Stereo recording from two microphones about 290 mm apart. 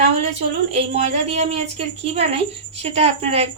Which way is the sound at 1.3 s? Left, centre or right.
Right.